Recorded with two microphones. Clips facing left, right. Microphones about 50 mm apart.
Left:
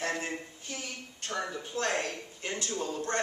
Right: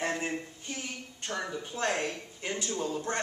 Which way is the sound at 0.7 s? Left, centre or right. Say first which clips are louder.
Right 1 dB; centre.